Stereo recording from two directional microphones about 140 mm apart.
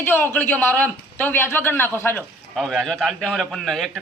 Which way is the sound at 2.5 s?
Centre (ahead or behind).